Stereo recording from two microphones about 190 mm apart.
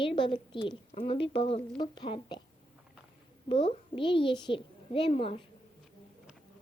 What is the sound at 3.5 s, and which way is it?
A woman's voice, 25° left (ahead or behind).